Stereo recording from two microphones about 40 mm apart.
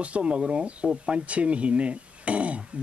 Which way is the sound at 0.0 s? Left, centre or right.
Right.